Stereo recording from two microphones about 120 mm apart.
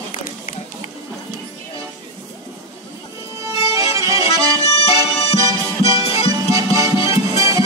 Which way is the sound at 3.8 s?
30° right (ahead or behind).